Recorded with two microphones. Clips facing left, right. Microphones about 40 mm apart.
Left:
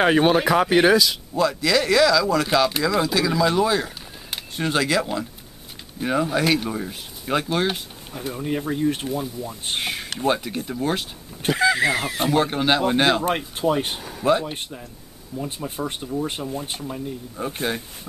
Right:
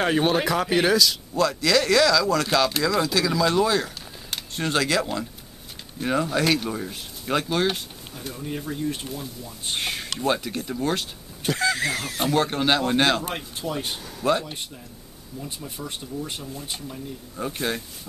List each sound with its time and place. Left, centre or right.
0.0 s speech: centre
8.4 s speech: left
9.8 s speech: centre
13.6 s speech: left
13.9 s speech: centre
14.4 s speech: left
17.4 s speech: centre